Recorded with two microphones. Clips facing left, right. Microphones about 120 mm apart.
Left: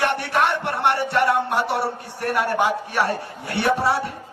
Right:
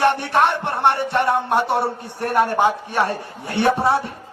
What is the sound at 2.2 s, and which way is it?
A man's voice, 25° right (ahead or behind).